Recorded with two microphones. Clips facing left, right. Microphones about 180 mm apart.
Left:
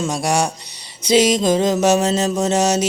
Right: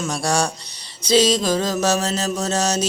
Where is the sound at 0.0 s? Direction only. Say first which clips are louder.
Left 2 dB; 20° left (ahead or behind).